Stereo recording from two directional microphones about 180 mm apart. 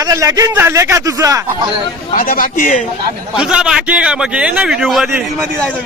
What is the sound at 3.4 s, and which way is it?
A man's voice, 5° right (ahead or behind).